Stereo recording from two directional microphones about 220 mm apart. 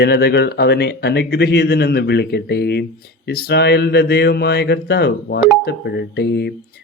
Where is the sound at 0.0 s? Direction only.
45° left (ahead or behind).